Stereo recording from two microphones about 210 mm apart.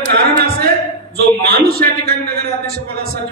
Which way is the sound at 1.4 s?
50° right (ahead or behind).